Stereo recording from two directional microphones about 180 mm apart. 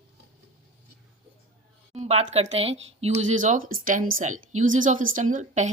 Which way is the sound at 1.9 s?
35° right (ahead or behind).